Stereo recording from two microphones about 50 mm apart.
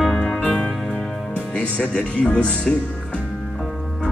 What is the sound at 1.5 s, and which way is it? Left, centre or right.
Speech, centre.